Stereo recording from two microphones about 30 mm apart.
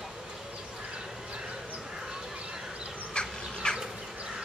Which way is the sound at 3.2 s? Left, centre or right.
Left.